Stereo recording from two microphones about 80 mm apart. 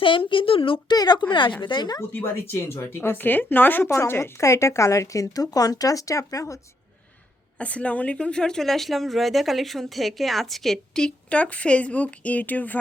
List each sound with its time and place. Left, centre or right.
0.0 s speech: left
0.9 s speech: left
1.3 s speech: left
1.6 s speech: left
2.0 s a woman's voice: left
3.9 s a woman's voice: left
7.6 s speech: centre